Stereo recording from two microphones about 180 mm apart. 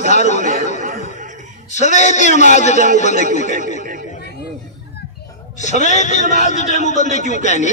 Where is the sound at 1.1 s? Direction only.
45° right (ahead or behind).